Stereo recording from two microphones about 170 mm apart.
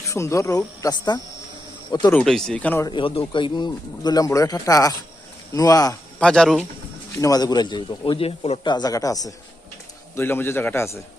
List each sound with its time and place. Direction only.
0.0 s speech: 15° left (ahead or behind)
2.1 s speech: 5° left (ahead or behind)
2.8 s speech: 30° left (ahead or behind)
6.1 s speech: 5° left (ahead or behind)
7.2 s a man's voice: 20° left (ahead or behind)